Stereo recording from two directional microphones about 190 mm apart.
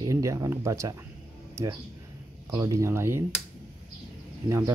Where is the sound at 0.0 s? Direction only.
15° right (ahead or behind).